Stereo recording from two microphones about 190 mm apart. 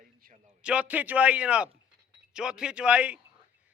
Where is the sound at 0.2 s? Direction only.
45° right (ahead or behind).